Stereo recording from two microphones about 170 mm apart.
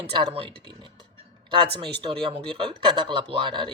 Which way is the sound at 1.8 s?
30° right (ahead or behind).